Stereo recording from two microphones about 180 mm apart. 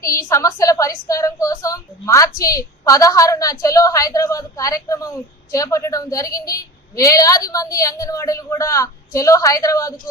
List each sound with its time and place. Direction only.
0.0 s a woman's voice: 15° left (ahead or behind)